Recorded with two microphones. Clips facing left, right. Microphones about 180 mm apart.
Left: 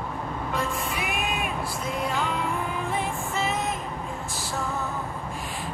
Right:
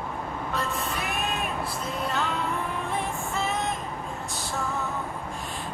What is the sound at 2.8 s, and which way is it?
Music, centre (ahead or behind).